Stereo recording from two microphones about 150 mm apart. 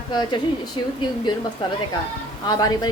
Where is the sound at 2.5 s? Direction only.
25° left (ahead or behind).